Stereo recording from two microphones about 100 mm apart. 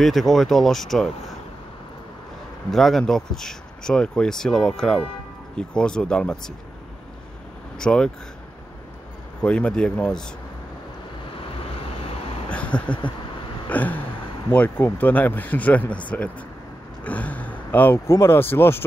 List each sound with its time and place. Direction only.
0.0 s speech: centre (ahead or behind)
2.7 s speech: centre (ahead or behind)
7.8 s speech: 5° left (ahead or behind)
9.4 s speech: 10° left (ahead or behind)
11.8 s vehicle: 75° left (ahead or behind)
12.4 s a sound: 10° left (ahead or behind)
13.7 s speech: 15° left (ahead or behind)
17.0 s speech: 15° left (ahead or behind)